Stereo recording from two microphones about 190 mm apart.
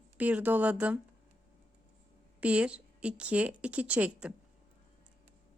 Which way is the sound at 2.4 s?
5° right (ahead or behind).